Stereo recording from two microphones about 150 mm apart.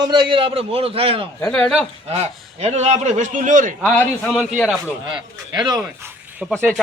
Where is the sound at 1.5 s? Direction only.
5° left (ahead or behind).